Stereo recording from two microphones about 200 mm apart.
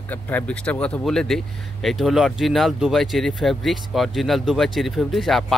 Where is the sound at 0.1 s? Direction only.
10° left (ahead or behind).